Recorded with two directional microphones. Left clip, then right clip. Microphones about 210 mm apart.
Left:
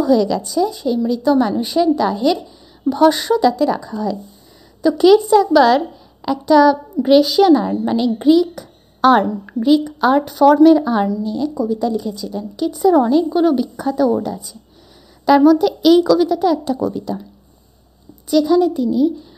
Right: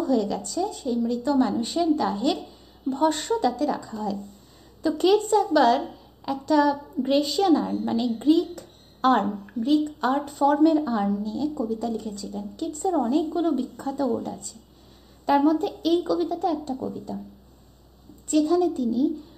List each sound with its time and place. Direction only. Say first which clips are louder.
0.0 s a woman's voice: left 9 dB; 40° left (ahead or behind)
18.3 s a woman's voice: left 7 dB; 40° left (ahead or behind)